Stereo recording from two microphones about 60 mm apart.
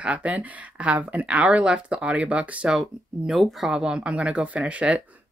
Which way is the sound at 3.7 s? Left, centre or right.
Centre.